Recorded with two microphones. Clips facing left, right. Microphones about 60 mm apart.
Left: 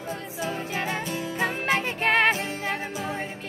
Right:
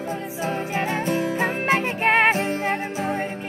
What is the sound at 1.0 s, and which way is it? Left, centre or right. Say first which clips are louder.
Music: right 5 dB; right.